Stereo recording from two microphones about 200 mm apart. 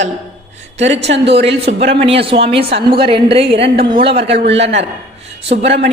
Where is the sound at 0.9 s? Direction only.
60° right (ahead or behind).